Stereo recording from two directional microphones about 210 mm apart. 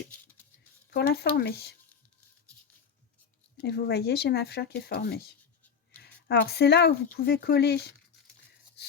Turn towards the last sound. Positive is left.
turn(degrees=50)  # may be behind; listen again after turning